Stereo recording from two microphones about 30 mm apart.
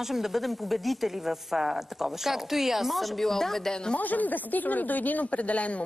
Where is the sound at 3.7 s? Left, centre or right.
Left.